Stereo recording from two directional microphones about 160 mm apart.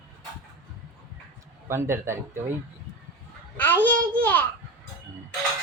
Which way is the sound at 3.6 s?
10° left (ahead or behind).